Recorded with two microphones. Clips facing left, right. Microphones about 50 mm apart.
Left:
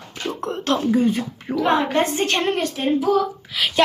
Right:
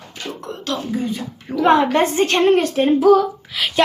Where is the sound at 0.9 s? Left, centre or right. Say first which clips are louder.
Left 5 dB; left.